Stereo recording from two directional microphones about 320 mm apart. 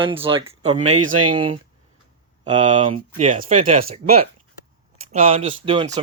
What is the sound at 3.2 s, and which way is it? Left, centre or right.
Speech, right.